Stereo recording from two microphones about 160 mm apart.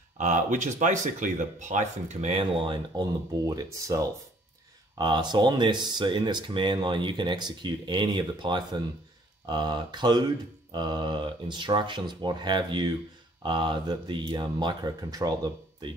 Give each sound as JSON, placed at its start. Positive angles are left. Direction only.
{"t": 0.2, "sound": "speech", "side_deg": -50}